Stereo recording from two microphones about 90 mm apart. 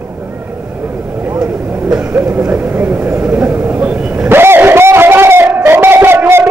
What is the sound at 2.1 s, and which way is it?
Vehicle, 20° right (ahead or behind).